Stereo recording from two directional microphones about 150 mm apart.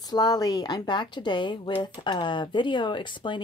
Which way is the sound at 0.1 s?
25° left (ahead or behind).